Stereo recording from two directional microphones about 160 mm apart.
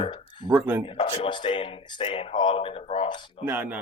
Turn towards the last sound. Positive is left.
turn(degrees=-10)  # may be behind; listen again after turning